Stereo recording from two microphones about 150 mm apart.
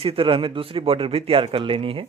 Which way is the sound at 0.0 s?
40° right (ahead or behind).